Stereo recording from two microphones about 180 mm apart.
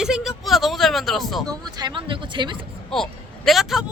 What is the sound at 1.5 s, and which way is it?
Speech, 25° right (ahead or behind).